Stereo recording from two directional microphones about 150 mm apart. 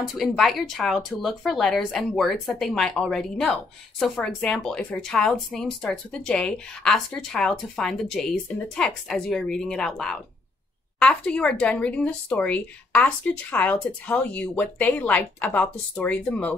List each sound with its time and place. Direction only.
0.0 s speech: centre (ahead or behind)